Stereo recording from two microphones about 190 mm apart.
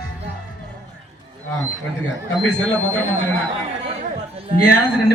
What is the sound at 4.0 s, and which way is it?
Chatter, 30° right (ahead or behind).